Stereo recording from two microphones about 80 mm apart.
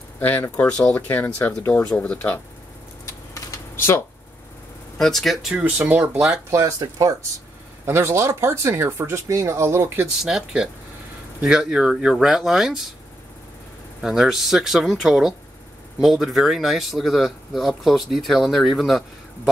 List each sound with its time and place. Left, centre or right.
0.2 s speech: left
0.9 s speech: left
3.5 s a sound: left
4.9 s speech: centre
5.7 s speech: right
6.5 s speech: right
7.8 s speech: right
10.2 s speech: centre
14.0 s speech: centre